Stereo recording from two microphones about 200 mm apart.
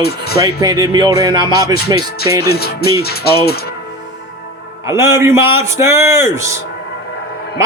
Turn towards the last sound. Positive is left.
turn(degrees=-15)  # may be behind; listen again after turning